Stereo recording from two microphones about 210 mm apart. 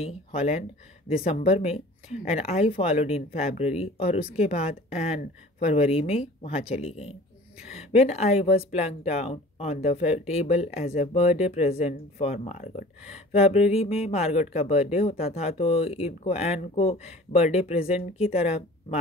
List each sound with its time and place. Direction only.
0.0 s speech: 30° left (ahead or behind)